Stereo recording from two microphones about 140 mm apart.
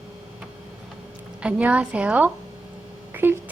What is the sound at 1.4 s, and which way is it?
A woman's voice, 10° right (ahead or behind).